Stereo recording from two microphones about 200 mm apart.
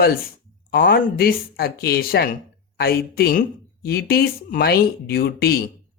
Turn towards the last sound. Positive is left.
turn(degrees=50)  # may be behind; listen again after turning